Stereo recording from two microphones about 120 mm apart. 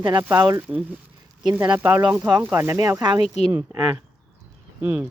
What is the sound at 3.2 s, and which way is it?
Speech, 65° left (ahead or behind).